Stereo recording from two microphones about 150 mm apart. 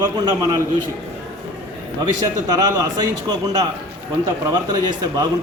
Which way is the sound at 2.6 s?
25° right (ahead or behind).